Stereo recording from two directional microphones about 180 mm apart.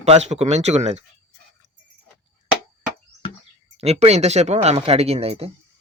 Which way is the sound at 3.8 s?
35° right (ahead or behind).